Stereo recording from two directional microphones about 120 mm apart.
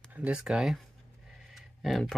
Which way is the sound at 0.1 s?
10° right (ahead or behind).